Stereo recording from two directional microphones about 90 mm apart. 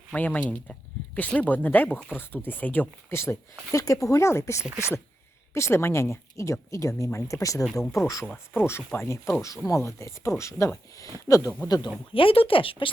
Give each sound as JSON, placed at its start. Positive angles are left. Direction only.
{"t": 0.1, "sound": "speech", "side_deg": 15}
{"t": 3.1, "sound": "speech", "side_deg": 30}
{"t": 12.1, "sound": "speech", "side_deg": 85}